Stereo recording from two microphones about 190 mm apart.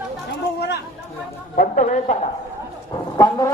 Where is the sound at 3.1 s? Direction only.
20° left (ahead or behind).